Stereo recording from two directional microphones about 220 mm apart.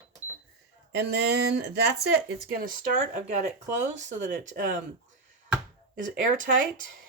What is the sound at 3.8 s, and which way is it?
Speech, 35° right (ahead or behind).